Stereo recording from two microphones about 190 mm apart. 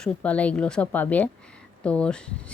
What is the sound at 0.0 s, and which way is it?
A woman's voice, 5° left (ahead or behind).